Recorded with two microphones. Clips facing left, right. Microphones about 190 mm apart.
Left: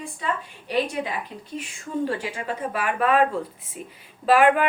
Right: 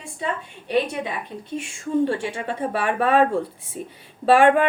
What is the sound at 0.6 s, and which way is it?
Speech, 25° right (ahead or behind).